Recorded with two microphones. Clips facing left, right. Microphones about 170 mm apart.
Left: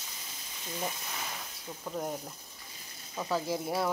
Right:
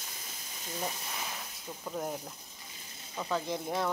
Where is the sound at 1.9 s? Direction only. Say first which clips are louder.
Left 1 dB; centre (ahead or behind).